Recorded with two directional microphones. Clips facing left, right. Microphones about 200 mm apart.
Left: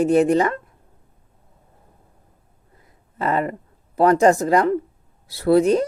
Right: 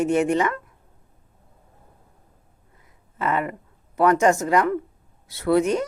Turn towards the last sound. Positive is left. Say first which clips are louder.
# left 4 dB
turn(degrees=35)  # may be behind; listen again after turning